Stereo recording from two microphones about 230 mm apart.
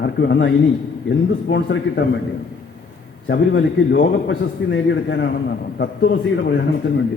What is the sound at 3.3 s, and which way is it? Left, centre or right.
A man's voice, left.